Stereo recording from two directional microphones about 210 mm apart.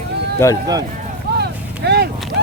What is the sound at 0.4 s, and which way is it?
Speech, 15° left (ahead or behind).